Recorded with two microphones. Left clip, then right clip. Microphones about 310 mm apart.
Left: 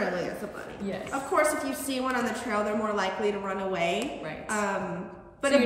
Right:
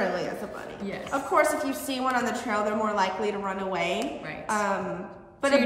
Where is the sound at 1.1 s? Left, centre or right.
Centre.